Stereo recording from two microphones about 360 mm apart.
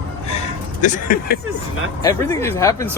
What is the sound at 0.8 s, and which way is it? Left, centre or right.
Speech, left.